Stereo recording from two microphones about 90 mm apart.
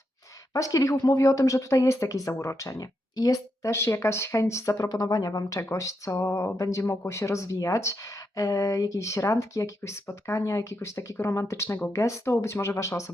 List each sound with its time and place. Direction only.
0.5 s speech: 40° left (ahead or behind)